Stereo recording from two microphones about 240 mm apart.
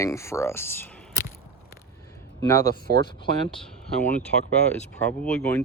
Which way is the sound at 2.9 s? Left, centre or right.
Right.